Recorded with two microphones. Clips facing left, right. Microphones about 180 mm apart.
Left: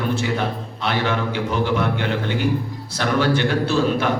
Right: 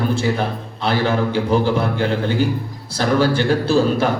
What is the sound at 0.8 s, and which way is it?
A man's voice, 35° right (ahead or behind).